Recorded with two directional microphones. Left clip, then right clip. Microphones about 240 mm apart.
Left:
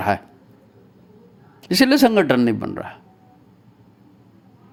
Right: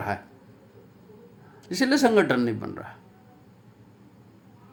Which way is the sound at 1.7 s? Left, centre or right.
Left.